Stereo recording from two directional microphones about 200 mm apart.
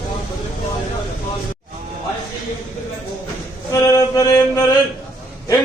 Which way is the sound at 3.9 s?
15° left (ahead or behind).